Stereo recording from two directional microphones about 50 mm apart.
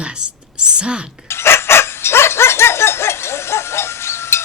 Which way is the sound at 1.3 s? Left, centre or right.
Left.